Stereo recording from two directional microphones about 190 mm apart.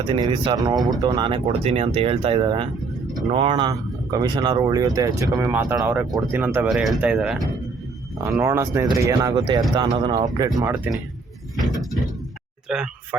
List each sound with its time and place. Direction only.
0.1 s speech: 25° right (ahead or behind)
12.6 s speech: 5° right (ahead or behind)